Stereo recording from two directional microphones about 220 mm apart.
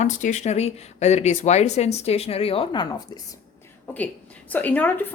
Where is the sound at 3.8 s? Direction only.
5° left (ahead or behind).